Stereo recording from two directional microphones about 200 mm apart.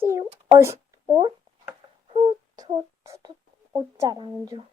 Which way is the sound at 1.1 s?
25° right (ahead or behind).